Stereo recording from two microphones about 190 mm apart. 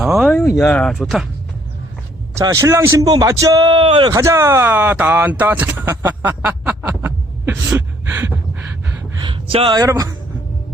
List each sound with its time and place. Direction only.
0.0 s a sound: 5° right (ahead or behind)
0.3 s speech: 10° left (ahead or behind)
2.4 s a man's voice: 15° right (ahead or behind)
9.1 s speech: 25° right (ahead or behind)